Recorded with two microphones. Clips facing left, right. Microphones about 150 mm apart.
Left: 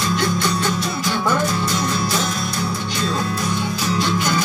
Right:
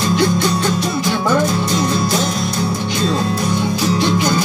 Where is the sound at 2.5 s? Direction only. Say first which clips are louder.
Right 5 dB; 30° right (ahead or behind).